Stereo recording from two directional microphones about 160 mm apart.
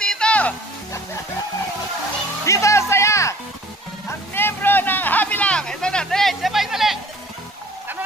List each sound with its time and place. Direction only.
0.0 s music: 5° left (ahead or behind)
2.4 s music: 20° left (ahead or behind)
4.3 s vehicle: 15° left (ahead or behind); by 7.0 s centre (ahead or behind)